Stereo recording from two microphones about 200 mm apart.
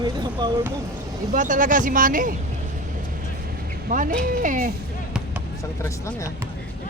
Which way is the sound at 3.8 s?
40° right (ahead or behind).